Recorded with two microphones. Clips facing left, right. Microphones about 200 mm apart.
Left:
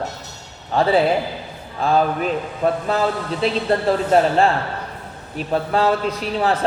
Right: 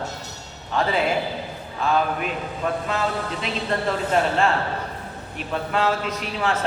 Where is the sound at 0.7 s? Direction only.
35° left (ahead or behind).